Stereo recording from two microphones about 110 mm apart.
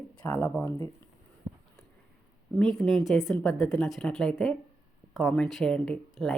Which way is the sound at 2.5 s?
5° left (ahead or behind).